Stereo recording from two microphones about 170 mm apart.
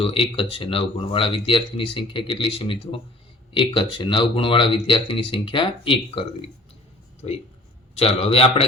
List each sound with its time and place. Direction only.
0.0 s speech: 35° left (ahead or behind)
7.9 s speech: 35° left (ahead or behind)